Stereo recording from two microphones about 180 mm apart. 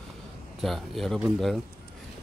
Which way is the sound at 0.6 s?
Centre (ahead or behind).